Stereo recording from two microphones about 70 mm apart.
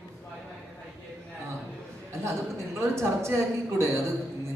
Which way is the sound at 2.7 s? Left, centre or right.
Right.